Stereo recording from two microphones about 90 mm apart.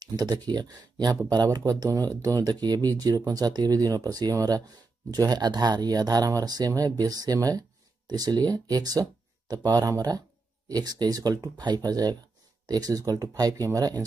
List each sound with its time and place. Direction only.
0.0 s speech: 50° right (ahead or behind)
1.6 s speech: 40° right (ahead or behind)